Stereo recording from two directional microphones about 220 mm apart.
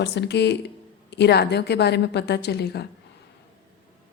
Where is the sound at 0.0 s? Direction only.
50° left (ahead or behind).